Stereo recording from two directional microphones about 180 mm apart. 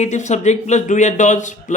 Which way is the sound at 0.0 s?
40° left (ahead or behind).